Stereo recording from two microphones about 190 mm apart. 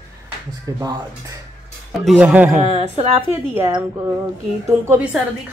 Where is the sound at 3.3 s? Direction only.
10° right (ahead or behind).